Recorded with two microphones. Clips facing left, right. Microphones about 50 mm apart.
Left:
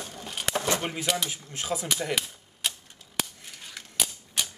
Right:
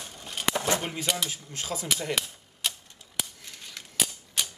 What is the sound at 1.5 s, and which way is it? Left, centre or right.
Speech, centre.